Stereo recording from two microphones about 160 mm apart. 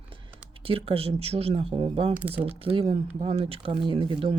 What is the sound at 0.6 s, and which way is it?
Speech, 35° right (ahead or behind).